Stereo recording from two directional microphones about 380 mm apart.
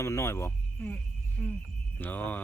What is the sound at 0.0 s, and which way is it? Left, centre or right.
Speech, centre.